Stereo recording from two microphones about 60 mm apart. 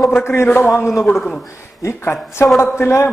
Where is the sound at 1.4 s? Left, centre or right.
Left.